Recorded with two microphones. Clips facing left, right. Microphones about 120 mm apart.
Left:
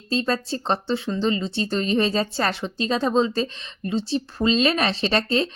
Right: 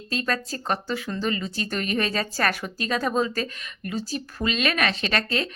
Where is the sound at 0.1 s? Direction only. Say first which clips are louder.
Left 4 dB; 30° left (ahead or behind).